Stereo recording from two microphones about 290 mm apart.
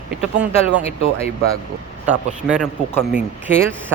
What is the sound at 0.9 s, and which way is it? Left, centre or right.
Speech, left.